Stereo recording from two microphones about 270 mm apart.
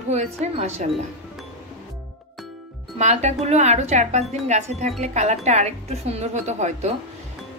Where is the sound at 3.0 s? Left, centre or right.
Right.